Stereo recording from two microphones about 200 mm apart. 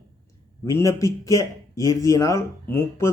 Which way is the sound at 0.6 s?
15° left (ahead or behind).